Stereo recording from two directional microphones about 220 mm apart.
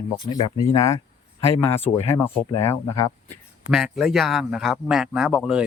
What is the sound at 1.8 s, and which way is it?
Speech, 25° left (ahead or behind).